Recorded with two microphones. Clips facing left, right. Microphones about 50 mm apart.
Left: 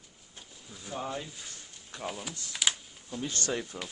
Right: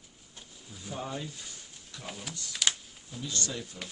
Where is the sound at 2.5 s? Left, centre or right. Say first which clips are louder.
Even; centre.